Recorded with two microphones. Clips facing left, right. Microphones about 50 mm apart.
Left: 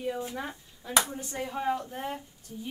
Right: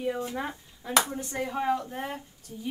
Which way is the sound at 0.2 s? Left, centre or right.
Right.